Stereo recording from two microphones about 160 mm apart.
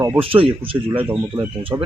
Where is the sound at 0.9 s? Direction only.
10° right (ahead or behind).